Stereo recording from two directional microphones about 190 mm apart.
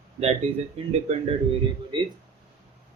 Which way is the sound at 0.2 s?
35° right (ahead or behind).